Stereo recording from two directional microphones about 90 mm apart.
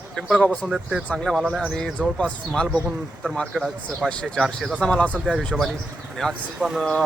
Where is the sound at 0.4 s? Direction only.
10° left (ahead or behind).